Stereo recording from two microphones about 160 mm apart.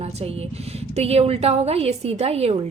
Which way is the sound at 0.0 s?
40° right (ahead or behind).